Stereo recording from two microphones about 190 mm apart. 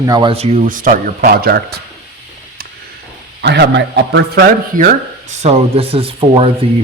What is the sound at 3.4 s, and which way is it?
A man's voice, 70° right (ahead or behind).